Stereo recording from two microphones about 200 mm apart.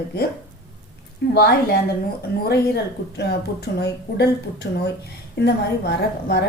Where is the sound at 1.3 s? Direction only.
55° left (ahead or behind).